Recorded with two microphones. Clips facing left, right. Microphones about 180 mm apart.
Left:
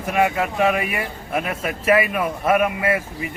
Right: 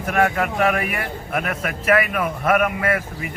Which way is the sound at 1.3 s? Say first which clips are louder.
Left 1 dB; 25° left (ahead or behind).